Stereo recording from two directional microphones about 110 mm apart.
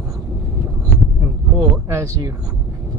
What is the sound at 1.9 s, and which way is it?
Speech, 30° right (ahead or behind).